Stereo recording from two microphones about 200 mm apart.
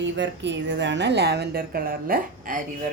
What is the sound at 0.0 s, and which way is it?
A woman's voice, 65° right (ahead or behind).